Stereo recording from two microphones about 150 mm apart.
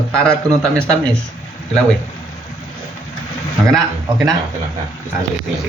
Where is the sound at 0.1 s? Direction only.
5° left (ahead or behind).